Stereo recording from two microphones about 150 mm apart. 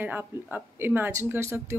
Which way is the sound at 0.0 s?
10° right (ahead or behind).